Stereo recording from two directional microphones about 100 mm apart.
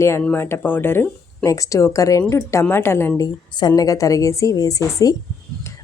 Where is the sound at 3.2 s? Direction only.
45° left (ahead or behind).